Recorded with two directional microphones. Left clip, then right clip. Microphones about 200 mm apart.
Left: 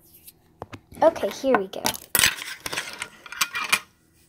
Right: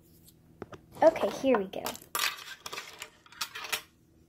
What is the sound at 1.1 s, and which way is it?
Speech, 10° left (ahead or behind).